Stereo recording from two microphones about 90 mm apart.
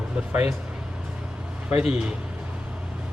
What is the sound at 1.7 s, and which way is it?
Speech, 5° right (ahead or behind).